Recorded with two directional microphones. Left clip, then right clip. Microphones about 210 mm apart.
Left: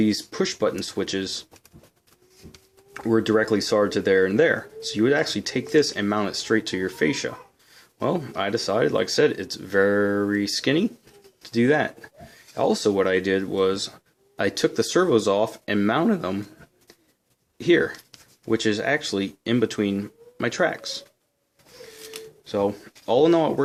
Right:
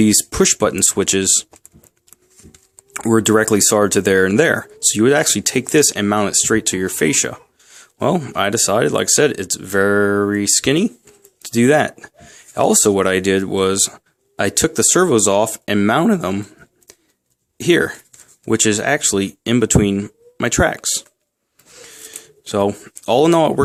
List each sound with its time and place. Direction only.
0.0 s speech: 45° right (ahead or behind)
2.9 s speech: 40° right (ahead or behind)
22.4 s speech: 40° right (ahead or behind)